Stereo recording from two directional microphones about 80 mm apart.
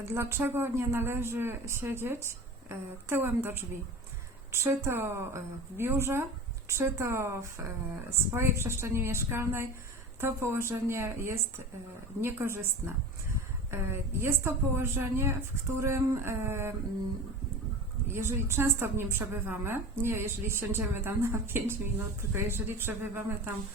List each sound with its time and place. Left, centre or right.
0.0 s a woman's voice: right
8.4 s a woman's voice: right
18.1 s a woman's voice: right